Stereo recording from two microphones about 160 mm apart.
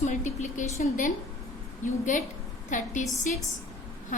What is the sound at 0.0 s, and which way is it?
A woman's voice, 45° left (ahead or behind).